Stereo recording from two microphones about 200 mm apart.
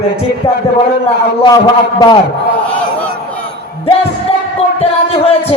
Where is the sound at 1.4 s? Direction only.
20° left (ahead or behind).